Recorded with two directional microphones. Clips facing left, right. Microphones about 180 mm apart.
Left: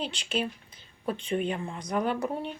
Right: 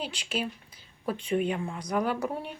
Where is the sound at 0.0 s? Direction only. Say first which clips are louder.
Left 2 dB; 5° right (ahead or behind).